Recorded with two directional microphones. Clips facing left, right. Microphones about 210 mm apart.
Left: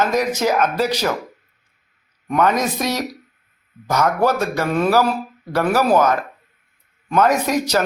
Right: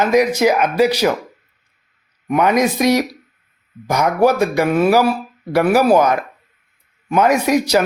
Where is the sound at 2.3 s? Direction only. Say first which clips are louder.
Right 3 dB; 10° right (ahead or behind).